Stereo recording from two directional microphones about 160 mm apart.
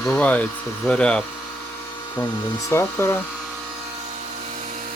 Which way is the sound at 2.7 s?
15° left (ahead or behind).